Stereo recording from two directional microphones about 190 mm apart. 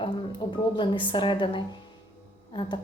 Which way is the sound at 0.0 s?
25° left (ahead or behind).